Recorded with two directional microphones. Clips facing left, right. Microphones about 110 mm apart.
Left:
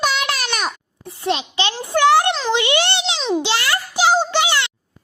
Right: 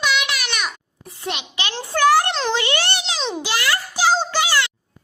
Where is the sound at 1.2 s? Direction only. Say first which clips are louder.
Left 7 dB; 30° left (ahead or behind).